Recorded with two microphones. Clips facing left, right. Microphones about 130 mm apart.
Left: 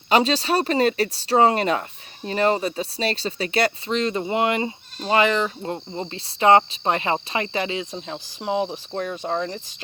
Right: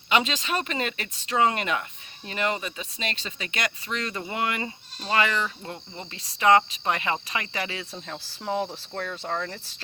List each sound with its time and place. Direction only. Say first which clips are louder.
0.1 s speech: left 6 dB; 35° left (ahead or behind); by 9.6 s 15° left (ahead or behind)